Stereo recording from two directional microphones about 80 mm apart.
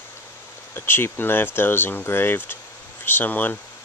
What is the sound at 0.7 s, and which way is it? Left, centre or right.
Speech, left.